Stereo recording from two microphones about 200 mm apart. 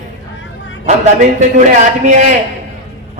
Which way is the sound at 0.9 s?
40° right (ahead or behind).